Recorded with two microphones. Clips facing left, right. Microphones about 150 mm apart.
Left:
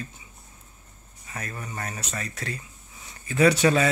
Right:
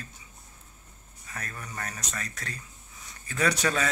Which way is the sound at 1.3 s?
25° left (ahead or behind).